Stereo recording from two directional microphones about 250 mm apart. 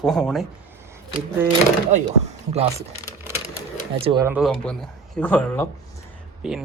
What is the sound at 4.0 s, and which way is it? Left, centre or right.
Speech, centre.